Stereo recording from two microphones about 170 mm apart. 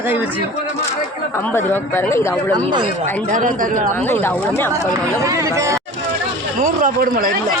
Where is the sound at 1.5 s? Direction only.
15° left (ahead or behind).